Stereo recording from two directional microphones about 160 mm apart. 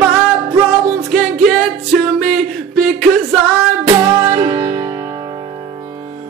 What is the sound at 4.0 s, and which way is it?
Music, 30° right (ahead or behind).